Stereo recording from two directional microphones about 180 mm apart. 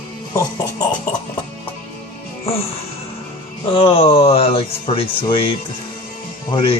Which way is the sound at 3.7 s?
30° left (ahead or behind).